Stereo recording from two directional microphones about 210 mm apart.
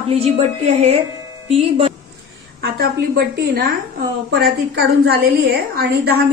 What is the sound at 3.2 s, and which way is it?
A woman's voice, 45° right (ahead or behind).